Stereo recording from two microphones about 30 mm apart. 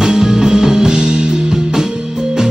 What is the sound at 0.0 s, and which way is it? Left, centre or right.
Music, centre.